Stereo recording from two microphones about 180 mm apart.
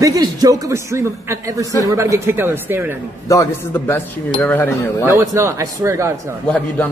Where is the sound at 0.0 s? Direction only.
20° right (ahead or behind).